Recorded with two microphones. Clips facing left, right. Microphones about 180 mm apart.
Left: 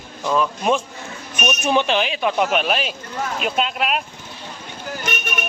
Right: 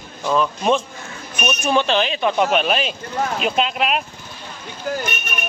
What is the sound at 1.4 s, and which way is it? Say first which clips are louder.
Speech: even; 15° left (ahead or behind).